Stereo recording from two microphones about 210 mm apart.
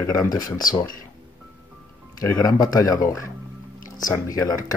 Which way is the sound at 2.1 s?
15° left (ahead or behind).